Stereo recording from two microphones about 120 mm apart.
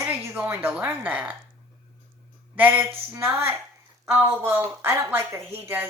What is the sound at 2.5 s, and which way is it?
Speech, 15° right (ahead or behind).